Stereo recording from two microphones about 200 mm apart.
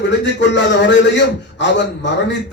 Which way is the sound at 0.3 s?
60° left (ahead or behind).